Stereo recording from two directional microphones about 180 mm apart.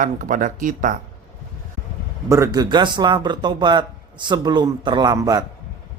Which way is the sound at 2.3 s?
20° right (ahead or behind).